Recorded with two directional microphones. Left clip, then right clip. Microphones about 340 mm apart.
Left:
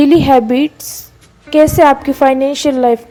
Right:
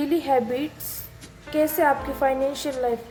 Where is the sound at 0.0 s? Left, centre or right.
Left.